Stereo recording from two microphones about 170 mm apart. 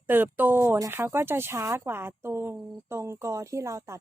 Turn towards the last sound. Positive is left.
turn(degrees=-15)  # may be behind; listen again after turning